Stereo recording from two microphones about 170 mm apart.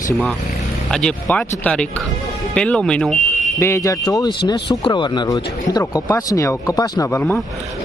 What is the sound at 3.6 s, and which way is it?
A man's voice, 20° left (ahead or behind).